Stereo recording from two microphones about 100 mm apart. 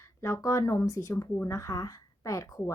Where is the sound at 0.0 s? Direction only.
30° left (ahead or behind).